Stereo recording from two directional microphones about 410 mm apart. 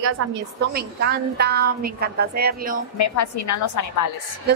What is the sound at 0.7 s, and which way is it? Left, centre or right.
A woman's voice, right.